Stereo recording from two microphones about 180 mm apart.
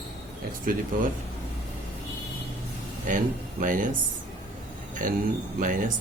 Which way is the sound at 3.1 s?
45° right (ahead or behind).